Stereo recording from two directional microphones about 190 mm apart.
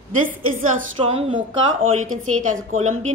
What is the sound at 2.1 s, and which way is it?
Speech, 90° right.